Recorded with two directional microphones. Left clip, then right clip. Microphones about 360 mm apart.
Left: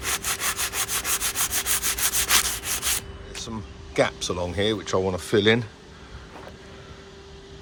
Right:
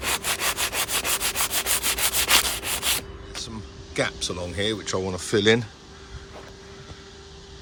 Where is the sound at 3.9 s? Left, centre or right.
Centre.